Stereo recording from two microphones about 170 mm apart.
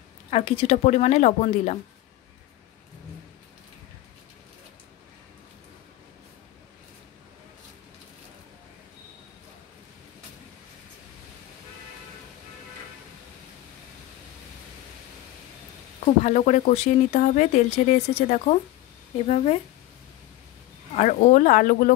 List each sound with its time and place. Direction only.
0.3 s a woman's voice: 35° left (ahead or behind)
16.3 s a woman's voice: 45° left (ahead or behind)
20.9 s speech: 45° left (ahead or behind)